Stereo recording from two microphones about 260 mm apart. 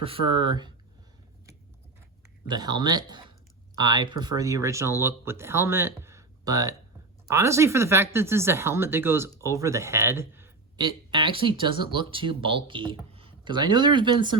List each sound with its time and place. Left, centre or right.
0.0 s speech: centre
2.5 s a man's voice: centre